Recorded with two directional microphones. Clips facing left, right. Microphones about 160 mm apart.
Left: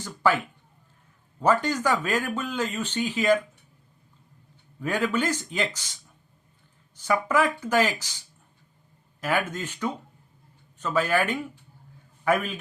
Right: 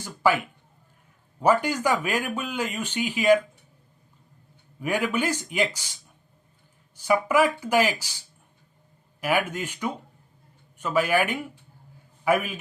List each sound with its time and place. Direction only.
0.0 s a sound: 10° right (ahead or behind)
1.4 s speech: 10° right (ahead or behind)
4.8 s speech: 10° right (ahead or behind)
7.0 s speech: 10° right (ahead or behind)
9.2 s a man's voice: 10° right (ahead or behind)